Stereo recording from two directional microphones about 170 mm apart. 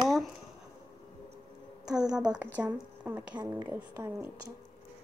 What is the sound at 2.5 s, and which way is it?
Speech, 10° right (ahead or behind).